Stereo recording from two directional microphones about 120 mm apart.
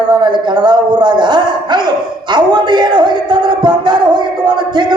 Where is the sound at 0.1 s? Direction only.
40° right (ahead or behind).